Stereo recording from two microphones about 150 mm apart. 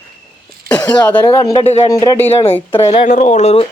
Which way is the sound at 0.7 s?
25° left (ahead or behind).